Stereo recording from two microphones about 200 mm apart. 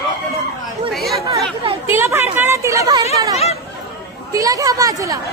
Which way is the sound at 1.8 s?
10° right (ahead or behind).